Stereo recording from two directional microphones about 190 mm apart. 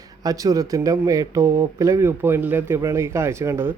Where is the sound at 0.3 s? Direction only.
20° right (ahead or behind).